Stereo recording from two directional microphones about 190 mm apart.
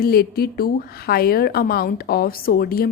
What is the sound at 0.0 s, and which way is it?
A woman's voice, 55° left (ahead or behind).